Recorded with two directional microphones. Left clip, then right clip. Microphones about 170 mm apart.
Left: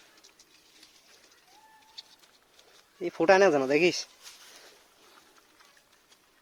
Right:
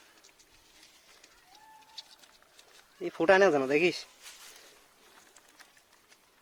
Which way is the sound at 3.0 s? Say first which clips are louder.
Left 2 dB; 10° left (ahead or behind).